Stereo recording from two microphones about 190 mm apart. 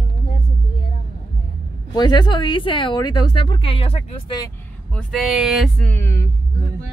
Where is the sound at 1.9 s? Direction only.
25° left (ahead or behind).